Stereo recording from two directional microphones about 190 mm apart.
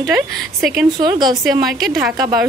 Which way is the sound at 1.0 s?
20° right (ahead or behind).